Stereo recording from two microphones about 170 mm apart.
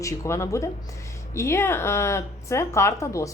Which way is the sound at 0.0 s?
20° left (ahead or behind).